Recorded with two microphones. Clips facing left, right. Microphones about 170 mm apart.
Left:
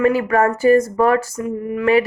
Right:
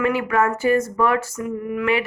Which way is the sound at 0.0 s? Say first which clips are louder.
Left 4 dB; 40° left (ahead or behind).